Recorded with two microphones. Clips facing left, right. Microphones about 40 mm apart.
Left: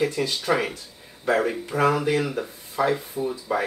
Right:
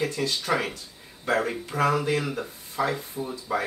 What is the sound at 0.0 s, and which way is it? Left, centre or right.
Speech, centre.